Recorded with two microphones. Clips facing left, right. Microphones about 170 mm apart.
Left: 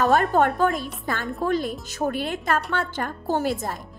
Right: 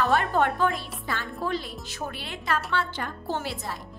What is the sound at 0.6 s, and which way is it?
A woman's voice, 45° left (ahead or behind).